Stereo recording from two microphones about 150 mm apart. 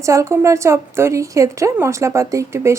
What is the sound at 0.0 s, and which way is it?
Speech, 20° right (ahead or behind).